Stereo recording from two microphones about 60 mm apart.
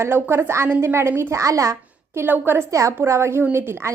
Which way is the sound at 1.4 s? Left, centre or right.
Right.